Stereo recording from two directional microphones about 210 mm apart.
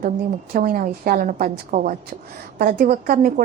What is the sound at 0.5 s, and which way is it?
A woman's voice, 40° right (ahead or behind).